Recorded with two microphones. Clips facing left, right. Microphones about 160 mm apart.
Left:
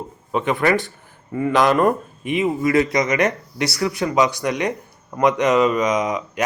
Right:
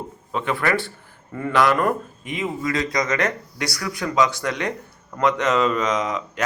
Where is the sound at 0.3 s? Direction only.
20° left (ahead or behind).